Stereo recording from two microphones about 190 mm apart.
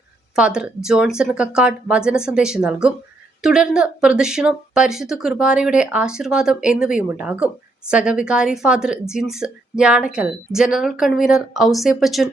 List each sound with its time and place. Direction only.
0.3 s speech: 5° right (ahead or behind)